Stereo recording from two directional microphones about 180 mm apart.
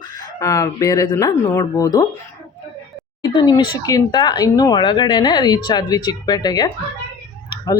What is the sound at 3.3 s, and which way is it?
Speech, 25° left (ahead or behind).